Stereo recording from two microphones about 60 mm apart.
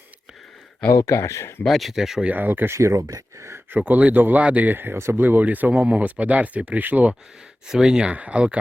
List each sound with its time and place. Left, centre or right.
0.9 s speech: left
1.6 s speech: centre
2.2 s speech: right
2.7 s speech: right
3.7 s speech: right
5.2 s speech: right
7.7 s speech: centre
8.1 s speech: right